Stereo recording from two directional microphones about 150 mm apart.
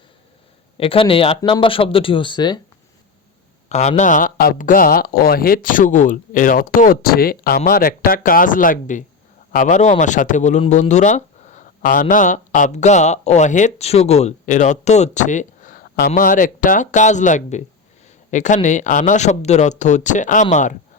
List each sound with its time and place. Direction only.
0.8 s speech: 35° left (ahead or behind)
3.7 s speech: 50° left (ahead or behind)